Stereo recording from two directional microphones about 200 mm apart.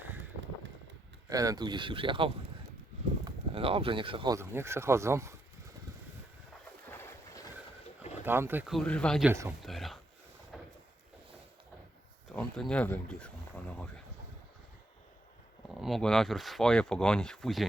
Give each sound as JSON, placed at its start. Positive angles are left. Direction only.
{"t": 1.3, "sound": "speech", "side_deg": -15}
{"t": 4.4, "sound": "speech", "side_deg": -15}
{"t": 6.8, "sound": "boat", "side_deg": 10}
{"t": 8.2, "sound": "speech", "side_deg": -10}
{"t": 9.3, "sound": "speech", "side_deg": -15}
{"t": 9.6, "sound": "a sound", "side_deg": 0}
{"t": 12.3, "sound": "speech", "side_deg": 5}
{"t": 15.8, "sound": "speech", "side_deg": 0}